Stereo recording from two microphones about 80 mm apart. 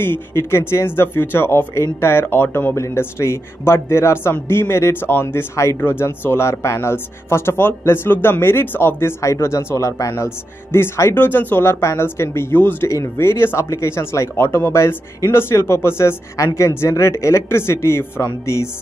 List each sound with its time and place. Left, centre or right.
0.0 s speech: left